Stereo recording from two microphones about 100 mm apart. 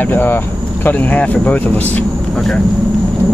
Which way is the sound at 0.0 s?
20° left (ahead or behind).